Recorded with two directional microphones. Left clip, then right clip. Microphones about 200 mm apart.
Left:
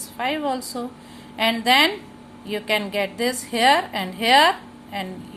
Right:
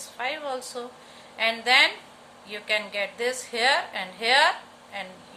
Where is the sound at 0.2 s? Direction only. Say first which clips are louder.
Left 6 dB; 25° left (ahead or behind).